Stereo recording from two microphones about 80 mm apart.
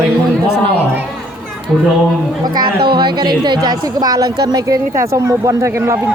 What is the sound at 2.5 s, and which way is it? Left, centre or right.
A woman's voice, right.